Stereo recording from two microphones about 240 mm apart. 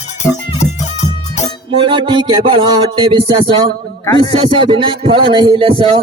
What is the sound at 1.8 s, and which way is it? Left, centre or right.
Speech, centre.